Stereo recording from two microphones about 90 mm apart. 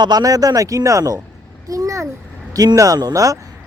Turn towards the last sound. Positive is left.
turn(degrees=-40)  # may be behind; listen again after turning